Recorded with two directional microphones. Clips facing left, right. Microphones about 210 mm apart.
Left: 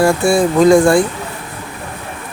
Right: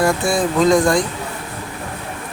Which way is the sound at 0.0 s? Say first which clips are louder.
Left 5 dB; 30° left (ahead or behind).